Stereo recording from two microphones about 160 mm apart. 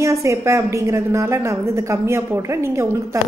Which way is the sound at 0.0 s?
20° right (ahead or behind).